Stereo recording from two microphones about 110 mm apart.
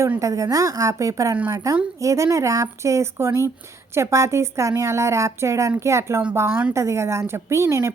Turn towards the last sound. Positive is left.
turn(degrees=-25)  # may be behind; listen again after turning